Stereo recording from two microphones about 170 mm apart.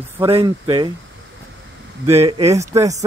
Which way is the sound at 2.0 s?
15° right (ahead or behind).